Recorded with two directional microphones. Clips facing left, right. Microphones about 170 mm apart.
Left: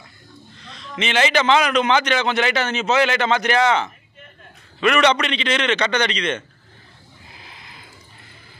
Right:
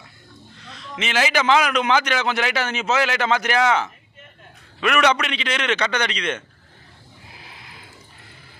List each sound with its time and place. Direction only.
0.7 s a man's voice: 5° right (ahead or behind)